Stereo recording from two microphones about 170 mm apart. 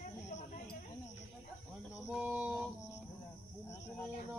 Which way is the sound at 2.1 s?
5° right (ahead or behind).